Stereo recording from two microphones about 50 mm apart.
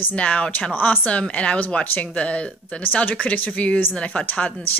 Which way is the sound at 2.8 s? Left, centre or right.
Left.